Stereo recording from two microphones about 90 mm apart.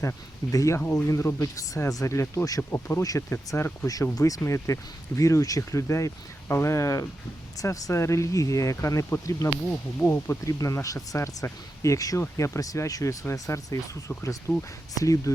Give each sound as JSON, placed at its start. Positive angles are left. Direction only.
{"t": 0.5, "sound": "speech", "side_deg": 35}
{"t": 0.8, "sound": "speech", "side_deg": 20}
{"t": 1.0, "sound": "speech", "side_deg": 30}
{"t": 2.6, "sound": "speech", "side_deg": 25}
{"t": 3.0, "sound": "speech", "side_deg": 40}
{"t": 3.2, "sound": "speech", "side_deg": 30}
{"t": 14.5, "sound": "speech", "side_deg": 20}
{"t": 14.9, "sound": "speech", "side_deg": 40}